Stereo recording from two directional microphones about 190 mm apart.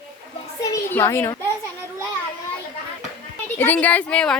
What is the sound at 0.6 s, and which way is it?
Speech, 15° left (ahead or behind).